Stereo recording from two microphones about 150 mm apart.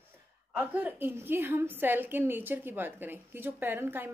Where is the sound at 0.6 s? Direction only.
10° right (ahead or behind).